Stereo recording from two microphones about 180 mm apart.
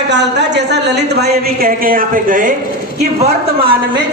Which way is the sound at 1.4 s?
55° right (ahead or behind).